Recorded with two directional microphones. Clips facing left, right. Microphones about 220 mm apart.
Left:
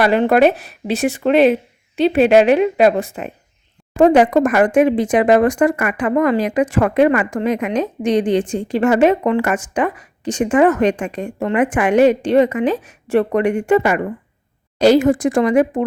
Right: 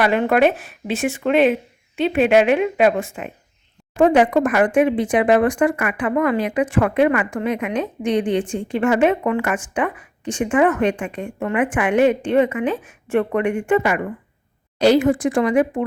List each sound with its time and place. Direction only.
0.0 s a woman's voice: 35° left (ahead or behind)